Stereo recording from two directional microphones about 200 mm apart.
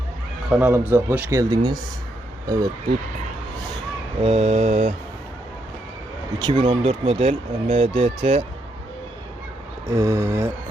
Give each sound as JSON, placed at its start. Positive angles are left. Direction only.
{"t": 0.5, "sound": "speech", "side_deg": -10}
{"t": 4.2, "sound": "mantra", "side_deg": -30}
{"t": 6.4, "sound": "speech", "side_deg": -25}
{"t": 9.8, "sound": "speech", "side_deg": -15}